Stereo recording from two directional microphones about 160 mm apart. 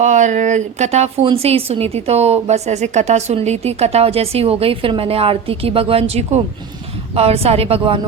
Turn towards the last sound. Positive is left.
turn(degrees=-40)  # may be behind; listen again after turning